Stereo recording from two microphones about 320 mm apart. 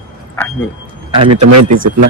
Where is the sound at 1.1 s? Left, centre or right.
Centre.